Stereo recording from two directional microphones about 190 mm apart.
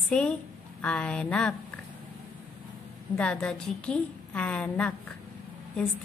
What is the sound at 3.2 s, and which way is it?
A woman's voice, 5° left (ahead or behind).